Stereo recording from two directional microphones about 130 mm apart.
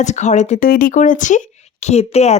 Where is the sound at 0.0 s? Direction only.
65° left (ahead or behind); by 1.4 s 80° left.